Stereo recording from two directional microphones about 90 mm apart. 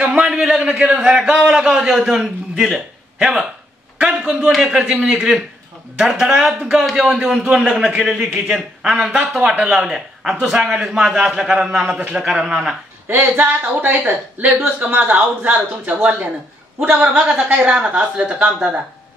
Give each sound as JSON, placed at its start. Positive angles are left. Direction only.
{"t": 0.0, "sound": "a man's voice", "side_deg": -5}
{"t": 13.1, "sound": "a man's voice", "side_deg": -25}